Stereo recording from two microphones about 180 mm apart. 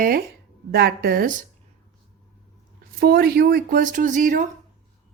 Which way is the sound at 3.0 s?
60° right (ahead or behind).